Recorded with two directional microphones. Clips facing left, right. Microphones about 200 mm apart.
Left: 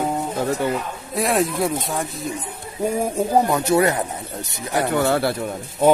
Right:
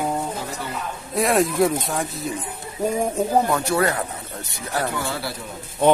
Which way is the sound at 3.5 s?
20° left (ahead or behind).